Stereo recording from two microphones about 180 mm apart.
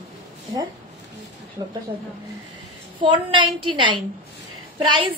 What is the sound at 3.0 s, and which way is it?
A woman's voice, 25° right (ahead or behind).